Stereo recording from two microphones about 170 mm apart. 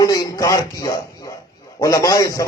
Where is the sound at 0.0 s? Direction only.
20° left (ahead or behind).